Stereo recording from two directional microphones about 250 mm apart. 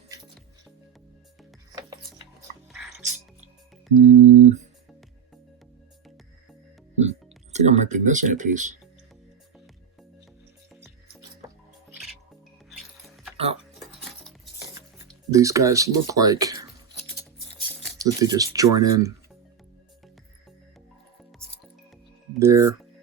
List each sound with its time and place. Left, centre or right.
1.7 s music: centre
3.0 s music: right
6.9 s music: right
13.3 s music: right
15.3 s speech: centre
17.9 s speech: centre
22.4 s speech: centre